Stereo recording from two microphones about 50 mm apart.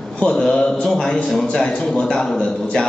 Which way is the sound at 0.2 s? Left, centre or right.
Centre.